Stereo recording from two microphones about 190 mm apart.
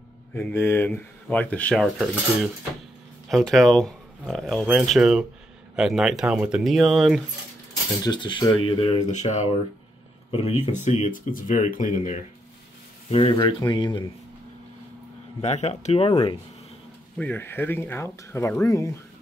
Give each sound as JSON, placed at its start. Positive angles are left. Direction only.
{"t": 0.3, "sound": "speech", "side_deg": 10}
{"t": 8.0, "sound": "speech", "side_deg": 25}
{"t": 13.1, "sound": "speech", "side_deg": 30}
{"t": 15.4, "sound": "speech", "side_deg": 35}
{"t": 17.2, "sound": "speech", "side_deg": 10}